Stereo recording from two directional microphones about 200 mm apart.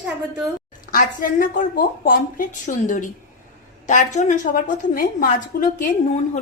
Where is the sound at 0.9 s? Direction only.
45° left (ahead or behind).